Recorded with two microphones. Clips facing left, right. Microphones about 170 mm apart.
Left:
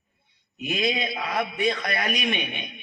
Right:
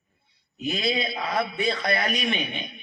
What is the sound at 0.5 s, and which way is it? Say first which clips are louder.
A man's voice: even; 35° right (ahead or behind).